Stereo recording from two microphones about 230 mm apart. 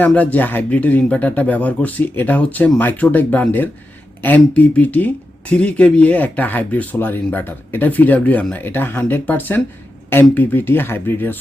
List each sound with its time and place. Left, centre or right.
0.0 s speech: centre